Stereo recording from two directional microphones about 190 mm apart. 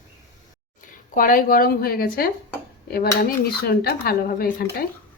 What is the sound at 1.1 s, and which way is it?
Speech, 45° left (ahead or behind).